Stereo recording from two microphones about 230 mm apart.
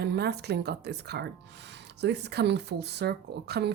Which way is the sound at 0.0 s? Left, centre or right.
Right.